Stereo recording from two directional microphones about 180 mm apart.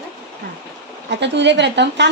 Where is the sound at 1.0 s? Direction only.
75° right (ahead or behind).